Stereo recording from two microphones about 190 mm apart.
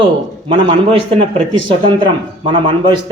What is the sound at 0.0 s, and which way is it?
Speech, 25° right (ahead or behind).